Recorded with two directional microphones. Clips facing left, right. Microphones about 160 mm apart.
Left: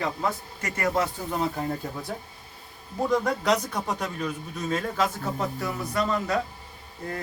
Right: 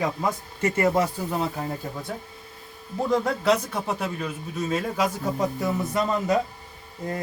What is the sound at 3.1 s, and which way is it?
Speech, 5° right (ahead or behind).